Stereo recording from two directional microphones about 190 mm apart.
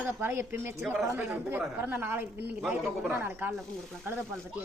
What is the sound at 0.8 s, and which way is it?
Speech, centre (ahead or behind).